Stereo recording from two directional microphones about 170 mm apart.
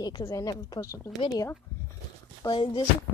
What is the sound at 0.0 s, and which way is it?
Speech, 25° left (ahead or behind).